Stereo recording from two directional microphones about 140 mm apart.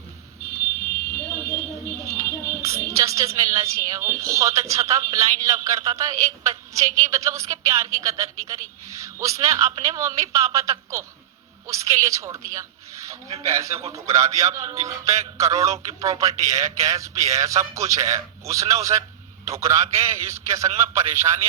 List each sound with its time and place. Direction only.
1.1 s a sound: 15° left (ahead or behind)
2.0 s music: 20° right (ahead or behind)
4.2 s a man's voice: 20° right (ahead or behind)